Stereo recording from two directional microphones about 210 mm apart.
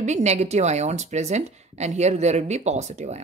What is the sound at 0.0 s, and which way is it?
Speech, 35° right (ahead or behind).